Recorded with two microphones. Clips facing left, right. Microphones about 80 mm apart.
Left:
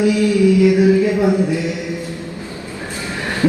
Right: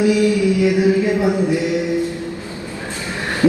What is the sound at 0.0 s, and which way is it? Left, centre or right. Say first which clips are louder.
Music: left 1 dB; right.